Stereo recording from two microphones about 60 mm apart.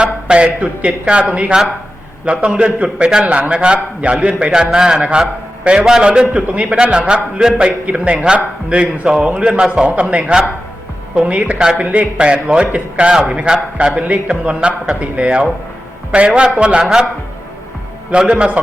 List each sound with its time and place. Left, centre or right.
0.0 s a man's voice: centre
18.1 s a man's voice: centre